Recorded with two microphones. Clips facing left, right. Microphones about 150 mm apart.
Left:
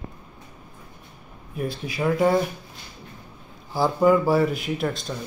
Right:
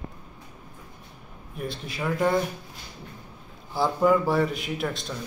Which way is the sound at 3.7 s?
5° left (ahead or behind).